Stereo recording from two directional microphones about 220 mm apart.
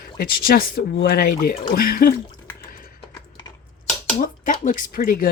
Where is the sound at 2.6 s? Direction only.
40° left (ahead or behind).